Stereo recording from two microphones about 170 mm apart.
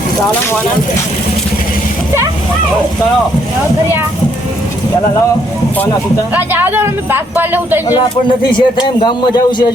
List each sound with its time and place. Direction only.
6.3 s speech: 10° right (ahead or behind)
8.5 s a man's voice: 25° left (ahead or behind)